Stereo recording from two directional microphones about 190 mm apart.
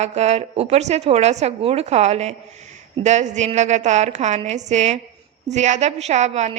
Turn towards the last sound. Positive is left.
turn(degrees=-35)  # may be behind; listen again after turning